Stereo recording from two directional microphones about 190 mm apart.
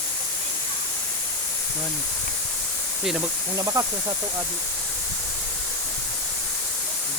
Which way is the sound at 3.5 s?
15° right (ahead or behind).